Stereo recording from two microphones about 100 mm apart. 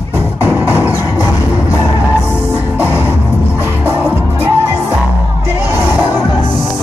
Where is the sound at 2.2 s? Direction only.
15° right (ahead or behind).